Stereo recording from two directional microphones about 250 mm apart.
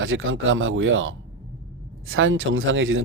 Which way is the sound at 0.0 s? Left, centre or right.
Right.